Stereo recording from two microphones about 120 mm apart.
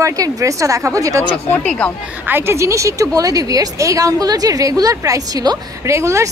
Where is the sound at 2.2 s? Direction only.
20° right (ahead or behind).